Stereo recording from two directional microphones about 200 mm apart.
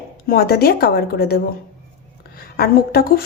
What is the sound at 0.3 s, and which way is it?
Speech, 50° left (ahead or behind).